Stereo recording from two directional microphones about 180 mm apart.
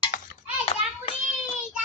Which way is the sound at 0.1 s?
50° left (ahead or behind).